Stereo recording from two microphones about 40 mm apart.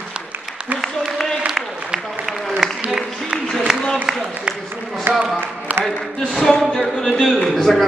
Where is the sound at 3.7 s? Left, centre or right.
Centre.